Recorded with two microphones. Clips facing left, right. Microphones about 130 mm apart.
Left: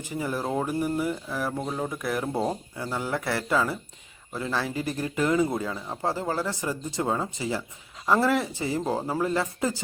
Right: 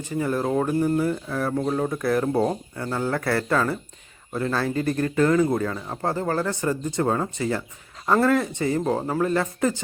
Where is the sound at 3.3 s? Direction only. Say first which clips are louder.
Right 2 dB; 20° left (ahead or behind).